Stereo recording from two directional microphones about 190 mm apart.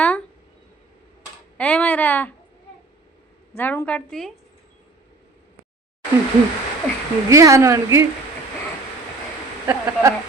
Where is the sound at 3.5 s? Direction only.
10° left (ahead or behind).